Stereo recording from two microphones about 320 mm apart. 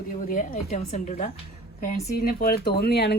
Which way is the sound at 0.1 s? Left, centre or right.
Left.